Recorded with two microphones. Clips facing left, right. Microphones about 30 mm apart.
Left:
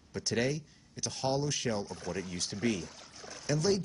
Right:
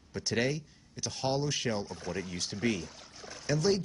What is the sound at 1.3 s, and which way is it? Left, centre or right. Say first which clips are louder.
Speech: right 1 dB; right.